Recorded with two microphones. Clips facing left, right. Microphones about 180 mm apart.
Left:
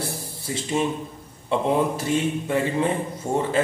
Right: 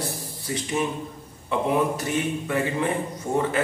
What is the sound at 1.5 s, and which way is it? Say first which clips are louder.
A man's voice: left 1 dB; 25° left (ahead or behind).